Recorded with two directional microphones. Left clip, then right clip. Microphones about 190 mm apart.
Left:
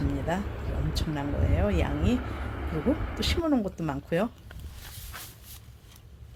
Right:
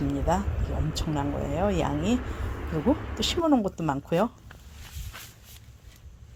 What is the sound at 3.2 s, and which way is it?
Speech, 15° right (ahead or behind).